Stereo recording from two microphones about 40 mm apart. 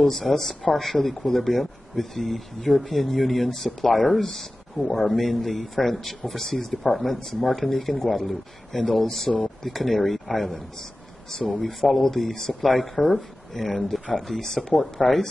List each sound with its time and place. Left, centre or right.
0.0 s speech: centre